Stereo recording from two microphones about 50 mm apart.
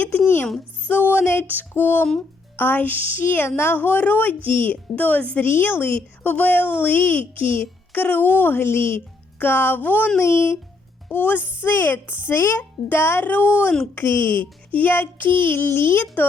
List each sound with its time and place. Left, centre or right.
0.9 s music: left
1.2 s music: left
1.5 s speech: left
5.5 s speech: left
9.4 s speech: left
10.2 s speech: left
11.1 s speech: left